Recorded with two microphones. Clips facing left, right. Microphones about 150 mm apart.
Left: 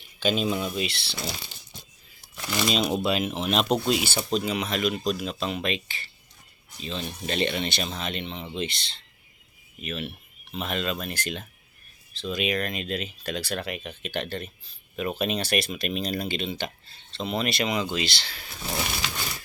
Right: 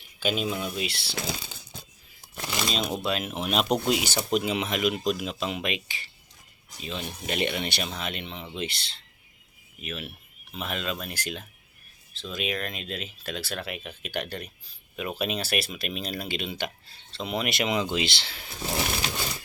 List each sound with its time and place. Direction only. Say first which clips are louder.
0.2 s speech: left 3 dB; 5° right (ahead or behind)
2.6 s speech: left 5 dB; 5° left (ahead or behind); by 18.4 s 20° right (ahead or behind)